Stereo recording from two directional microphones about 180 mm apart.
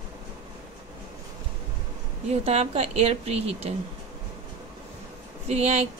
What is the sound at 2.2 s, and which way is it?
Speech, 35° right (ahead or behind).